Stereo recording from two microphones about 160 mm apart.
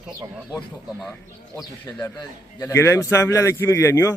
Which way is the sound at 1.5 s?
15° left (ahead or behind).